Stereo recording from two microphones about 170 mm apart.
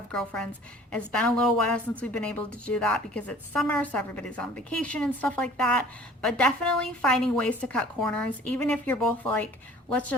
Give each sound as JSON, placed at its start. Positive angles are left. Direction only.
{"t": 0.1, "sound": "a woman's voice", "side_deg": 5}